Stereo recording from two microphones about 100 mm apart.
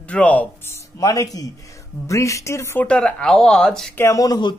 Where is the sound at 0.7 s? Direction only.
35° left (ahead or behind).